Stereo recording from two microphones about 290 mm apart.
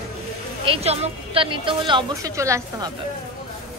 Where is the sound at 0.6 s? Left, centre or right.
Right.